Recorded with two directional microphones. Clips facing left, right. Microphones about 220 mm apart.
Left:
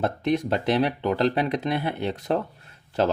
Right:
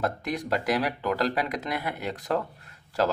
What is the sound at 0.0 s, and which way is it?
Speech, 25° left (ahead or behind).